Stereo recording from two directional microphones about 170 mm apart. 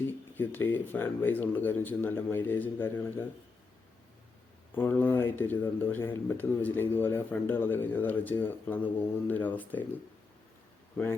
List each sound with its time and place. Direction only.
0.1 s speech: 10° left (ahead or behind)
4.7 s speech: 10° left (ahead or behind)